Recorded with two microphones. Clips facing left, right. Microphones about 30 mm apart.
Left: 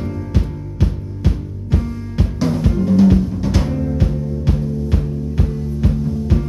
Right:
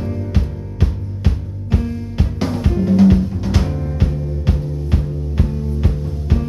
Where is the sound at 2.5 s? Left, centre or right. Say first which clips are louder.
Even; centre.